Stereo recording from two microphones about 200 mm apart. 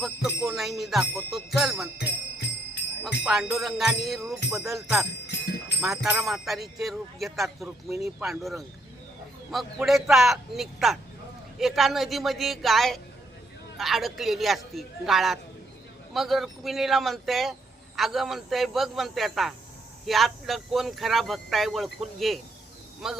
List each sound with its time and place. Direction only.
0.4 s speech: centre (ahead or behind)
2.0 s music: 60° left (ahead or behind)
3.2 s speech: 5° right (ahead or behind)